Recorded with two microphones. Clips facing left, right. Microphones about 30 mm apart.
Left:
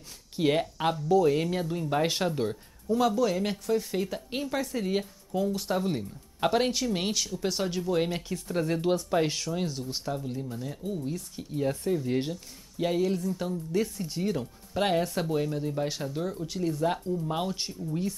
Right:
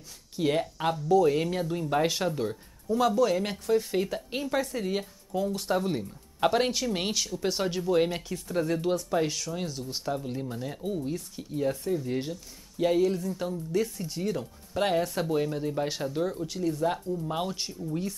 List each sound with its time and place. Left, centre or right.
0.4 s speech: centre
2.0 s speech: centre
10.3 s speech: right
11.1 s speech: centre
13.7 s speech: centre
16.4 s speech: centre